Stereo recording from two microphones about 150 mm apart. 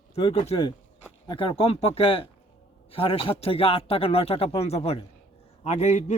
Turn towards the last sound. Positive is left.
turn(degrees=50)  # may be behind; listen again after turning